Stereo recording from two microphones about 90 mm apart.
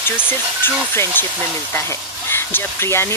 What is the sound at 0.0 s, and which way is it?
Speech, 25° left (ahead or behind).